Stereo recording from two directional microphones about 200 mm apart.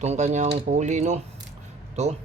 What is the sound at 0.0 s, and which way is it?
Speech, 35° right (ahead or behind).